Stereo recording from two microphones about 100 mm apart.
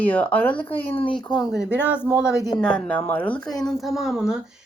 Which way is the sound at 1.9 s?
15° right (ahead or behind).